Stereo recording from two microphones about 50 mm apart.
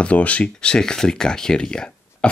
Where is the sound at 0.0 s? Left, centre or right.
Left.